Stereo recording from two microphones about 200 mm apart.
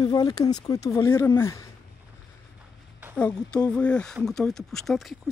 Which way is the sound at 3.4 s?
5° left (ahead or behind).